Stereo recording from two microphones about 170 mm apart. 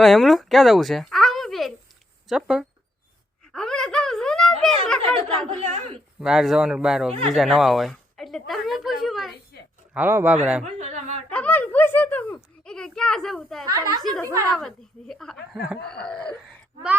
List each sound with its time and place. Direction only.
0.0 s speech: centre (ahead or behind)
3.5 s a sound: 5° left (ahead or behind)
6.1 s speech: 5° right (ahead or behind)
7.3 s a sound: centre (ahead or behind)
9.5 s a sound: 80° left
9.9 s speech: 10° right (ahead or behind)
10.8 s a woman's voice: 45° right (ahead or behind)
11.3 s a child's voice: 10° left (ahead or behind)
13.7 s a woman's voice: 20° right (ahead or behind)
14.0 s speech: 5° left (ahead or behind)